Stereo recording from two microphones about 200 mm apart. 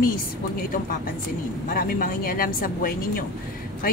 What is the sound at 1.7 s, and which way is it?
Speech, 45° left (ahead or behind).